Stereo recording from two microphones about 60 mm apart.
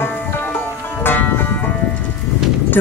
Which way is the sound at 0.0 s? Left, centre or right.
Left.